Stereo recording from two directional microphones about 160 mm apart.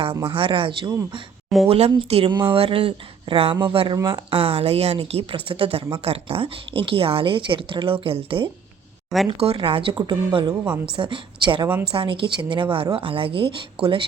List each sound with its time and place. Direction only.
0.3 s speech: 35° right (ahead or behind)
4.3 s speech: 35° right (ahead or behind)
10.5 s speech: 10° right (ahead or behind)
10.9 s speech: 30° right (ahead or behind)